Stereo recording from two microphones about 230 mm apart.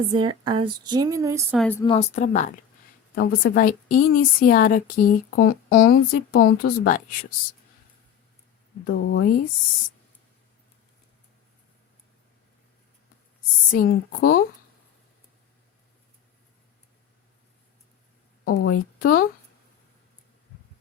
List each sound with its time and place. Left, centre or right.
0.1 s speech: right
1.5 s a woman's voice: centre
1.8 s a woman's voice: left
8.8 s a woman's voice: left
13.7 s a woman's voice: left
18.7 s a woman's voice: left